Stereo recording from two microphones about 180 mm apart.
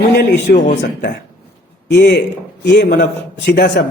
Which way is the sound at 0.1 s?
70° left (ahead or behind).